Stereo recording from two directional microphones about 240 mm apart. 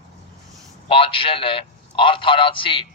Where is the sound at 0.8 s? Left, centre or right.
Left.